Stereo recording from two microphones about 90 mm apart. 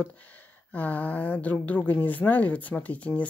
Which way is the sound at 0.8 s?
20° left (ahead or behind).